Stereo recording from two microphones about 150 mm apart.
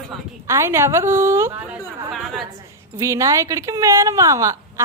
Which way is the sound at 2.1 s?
Centre (ahead or behind).